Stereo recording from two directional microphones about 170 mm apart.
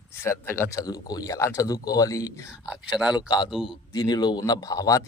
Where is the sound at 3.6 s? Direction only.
25° left (ahead or behind).